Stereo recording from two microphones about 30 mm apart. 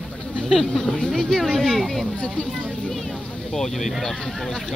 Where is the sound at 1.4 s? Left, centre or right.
Centre.